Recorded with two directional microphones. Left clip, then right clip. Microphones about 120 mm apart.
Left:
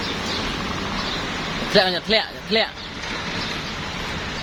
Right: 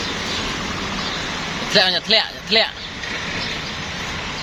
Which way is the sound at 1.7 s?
45° left (ahead or behind).